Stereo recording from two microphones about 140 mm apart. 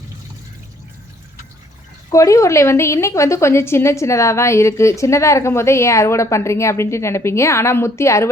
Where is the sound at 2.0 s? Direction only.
20° left (ahead or behind).